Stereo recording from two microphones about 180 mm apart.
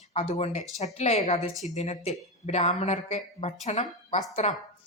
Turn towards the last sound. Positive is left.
turn(degrees=40)  # may be behind; listen again after turning